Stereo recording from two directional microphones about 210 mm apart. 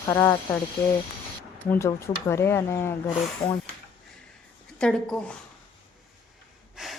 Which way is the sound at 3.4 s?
25° left (ahead or behind).